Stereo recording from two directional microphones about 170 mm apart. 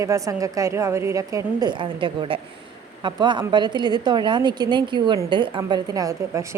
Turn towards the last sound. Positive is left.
turn(degrees=-20)  # may be behind; listen again after turning